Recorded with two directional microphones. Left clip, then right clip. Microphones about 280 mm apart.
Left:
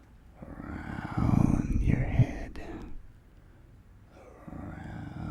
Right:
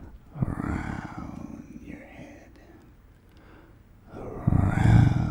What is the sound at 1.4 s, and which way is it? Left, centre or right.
Whispering, left.